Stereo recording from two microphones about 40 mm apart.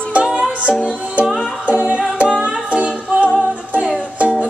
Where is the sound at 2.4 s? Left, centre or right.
Right.